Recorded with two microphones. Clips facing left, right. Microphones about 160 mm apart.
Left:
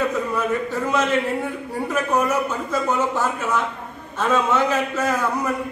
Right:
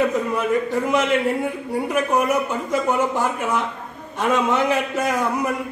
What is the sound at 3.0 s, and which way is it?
Speech, 15° right (ahead or behind).